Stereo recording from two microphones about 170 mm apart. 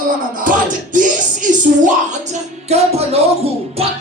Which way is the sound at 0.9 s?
50° right (ahead or behind).